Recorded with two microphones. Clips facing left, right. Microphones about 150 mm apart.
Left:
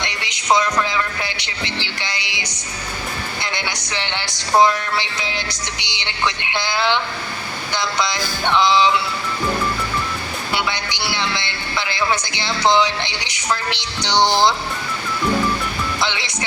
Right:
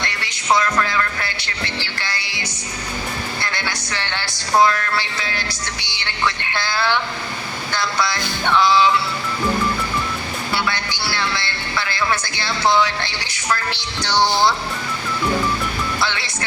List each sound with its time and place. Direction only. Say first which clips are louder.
0.0 s music: even; 20° left (ahead or behind)
3.4 s a man's voice: even; 20° left (ahead or behind)
10.5 s a man's voice: left 1 dB; 20° left (ahead or behind)
16.0 s a man's voice: even; 20° left (ahead or behind)